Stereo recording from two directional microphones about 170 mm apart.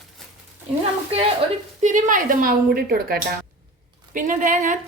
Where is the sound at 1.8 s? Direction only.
50° right (ahead or behind).